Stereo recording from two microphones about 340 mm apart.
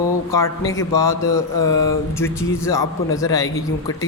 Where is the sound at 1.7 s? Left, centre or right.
Left.